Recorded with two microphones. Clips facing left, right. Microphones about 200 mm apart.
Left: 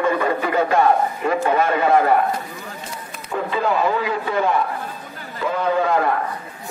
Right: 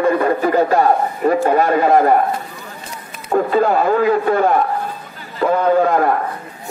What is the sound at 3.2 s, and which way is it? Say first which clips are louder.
Speech: right 7 dB; 45° right (ahead or behind).